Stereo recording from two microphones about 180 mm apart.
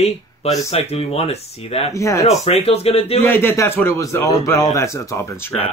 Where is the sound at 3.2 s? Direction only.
10° left (ahead or behind).